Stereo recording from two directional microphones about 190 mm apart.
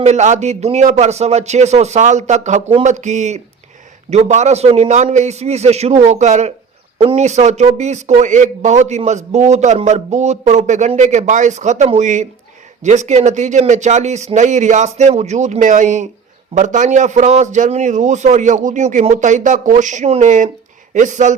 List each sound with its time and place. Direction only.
0.0 s speech: 35° right (ahead or behind)